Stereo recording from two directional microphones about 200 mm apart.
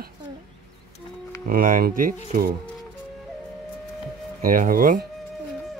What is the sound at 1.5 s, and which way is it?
Speech, 45° right (ahead or behind).